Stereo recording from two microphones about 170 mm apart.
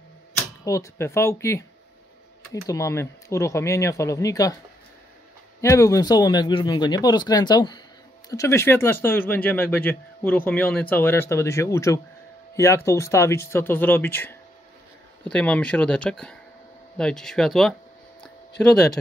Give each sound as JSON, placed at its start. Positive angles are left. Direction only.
{"t": 0.7, "sound": "speech", "side_deg": 15}
{"t": 5.6, "sound": "speech", "side_deg": 20}